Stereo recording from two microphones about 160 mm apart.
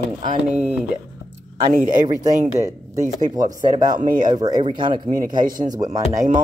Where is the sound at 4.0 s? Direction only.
55° right (ahead or behind).